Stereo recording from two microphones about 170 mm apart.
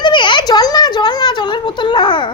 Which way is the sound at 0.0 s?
25° left (ahead or behind).